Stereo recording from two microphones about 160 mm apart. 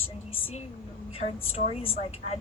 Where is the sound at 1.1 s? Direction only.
40° left (ahead or behind).